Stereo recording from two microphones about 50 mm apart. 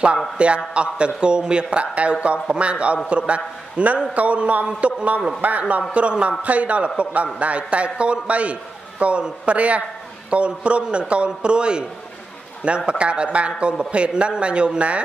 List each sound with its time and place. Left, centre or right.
0.4 s speech: right